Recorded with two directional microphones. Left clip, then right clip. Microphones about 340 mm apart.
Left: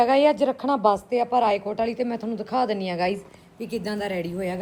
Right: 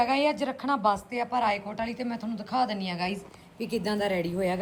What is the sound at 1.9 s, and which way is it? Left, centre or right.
Speech, right.